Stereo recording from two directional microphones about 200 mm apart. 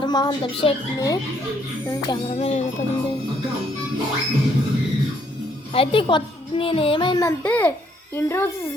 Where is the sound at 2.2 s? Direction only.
30° left (ahead or behind).